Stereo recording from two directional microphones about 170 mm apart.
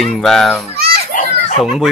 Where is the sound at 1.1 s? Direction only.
50° left (ahead or behind).